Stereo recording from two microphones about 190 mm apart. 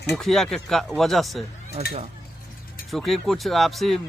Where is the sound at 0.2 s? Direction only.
Centre (ahead or behind).